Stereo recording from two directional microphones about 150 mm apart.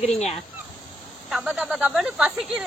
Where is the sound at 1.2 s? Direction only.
5° right (ahead or behind).